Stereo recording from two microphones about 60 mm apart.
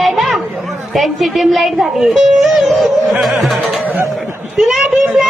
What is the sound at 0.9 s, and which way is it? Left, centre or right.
Speech, centre.